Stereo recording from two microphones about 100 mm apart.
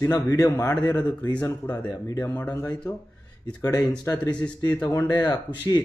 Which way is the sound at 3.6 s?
35° left (ahead or behind).